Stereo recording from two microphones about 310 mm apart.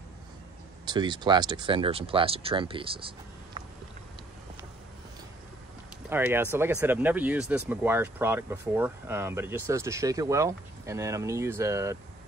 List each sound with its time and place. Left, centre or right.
0.8 s speech: centre
6.0 s speech: centre